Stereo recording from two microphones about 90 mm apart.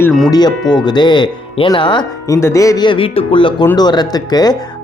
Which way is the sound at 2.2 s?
40° left (ahead or behind).